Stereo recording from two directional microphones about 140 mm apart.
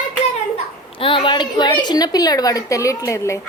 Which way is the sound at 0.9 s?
40° left (ahead or behind).